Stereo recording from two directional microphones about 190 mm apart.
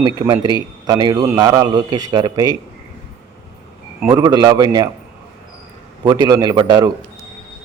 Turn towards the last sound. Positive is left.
turn(degrees=-25)  # may be behind; listen again after turning